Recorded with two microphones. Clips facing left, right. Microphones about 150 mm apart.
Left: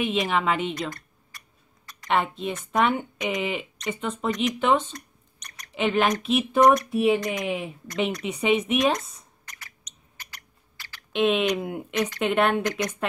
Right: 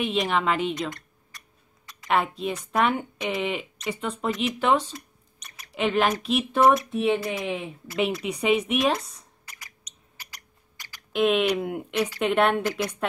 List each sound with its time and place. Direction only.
0.0 s a woman's voice: centre (ahead or behind)
7.2 s a woman's voice: 5° right (ahead or behind)
9.5 s a sound: 10° right (ahead or behind)
11.2 s a woman's voice: centre (ahead or behind)